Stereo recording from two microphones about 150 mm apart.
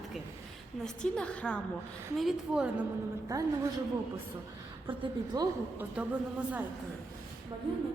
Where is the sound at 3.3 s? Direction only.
20° right (ahead or behind).